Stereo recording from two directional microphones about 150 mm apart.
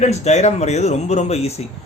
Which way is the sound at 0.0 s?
50° left (ahead or behind).